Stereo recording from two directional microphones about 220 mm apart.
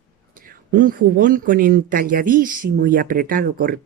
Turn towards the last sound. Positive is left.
turn(degrees=-40)  # may be behind; listen again after turning